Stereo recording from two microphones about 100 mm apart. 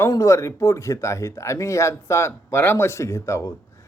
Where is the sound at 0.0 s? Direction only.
30° left (ahead or behind).